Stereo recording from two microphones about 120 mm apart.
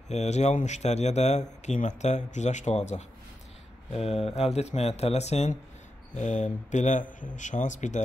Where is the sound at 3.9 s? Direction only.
55° left (ahead or behind).